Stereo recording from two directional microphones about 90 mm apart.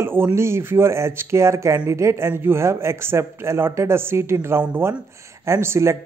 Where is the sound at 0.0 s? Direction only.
25° right (ahead or behind).